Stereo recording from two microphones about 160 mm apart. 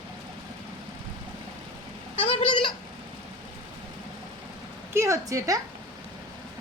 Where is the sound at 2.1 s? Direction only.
35° left (ahead or behind).